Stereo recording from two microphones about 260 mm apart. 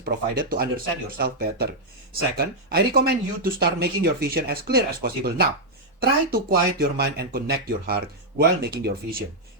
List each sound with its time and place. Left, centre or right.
0.0 s speech: right